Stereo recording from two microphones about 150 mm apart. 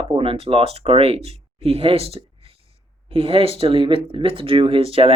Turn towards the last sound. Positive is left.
turn(degrees=-35)  # may be behind; listen again after turning